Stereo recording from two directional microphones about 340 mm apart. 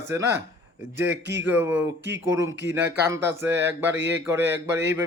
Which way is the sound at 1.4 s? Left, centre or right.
Centre.